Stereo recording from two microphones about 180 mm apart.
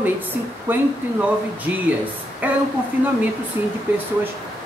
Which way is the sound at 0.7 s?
10° right (ahead or behind).